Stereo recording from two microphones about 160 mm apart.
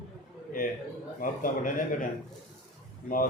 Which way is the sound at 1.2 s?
55° left (ahead or behind).